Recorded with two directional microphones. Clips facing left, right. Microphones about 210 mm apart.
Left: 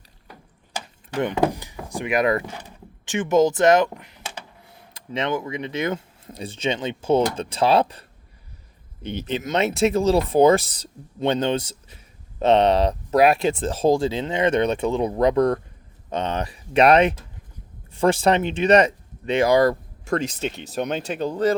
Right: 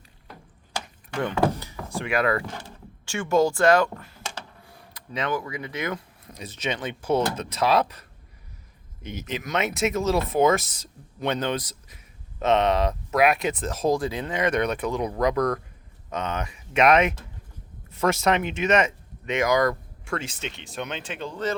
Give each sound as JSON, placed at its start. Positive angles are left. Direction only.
{"t": 1.2, "sound": "speech", "side_deg": 15}
{"t": 9.0, "sound": "speech", "side_deg": 30}